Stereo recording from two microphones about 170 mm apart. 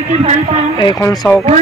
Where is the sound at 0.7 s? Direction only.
25° left (ahead or behind).